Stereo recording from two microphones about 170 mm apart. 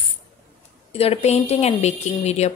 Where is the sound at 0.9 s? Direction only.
35° left (ahead or behind).